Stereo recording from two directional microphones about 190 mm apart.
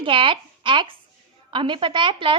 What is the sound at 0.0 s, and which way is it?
A woman's voice, 25° right (ahead or behind).